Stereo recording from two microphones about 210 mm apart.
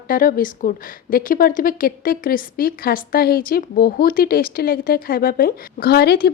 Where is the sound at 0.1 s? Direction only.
40° left (ahead or behind).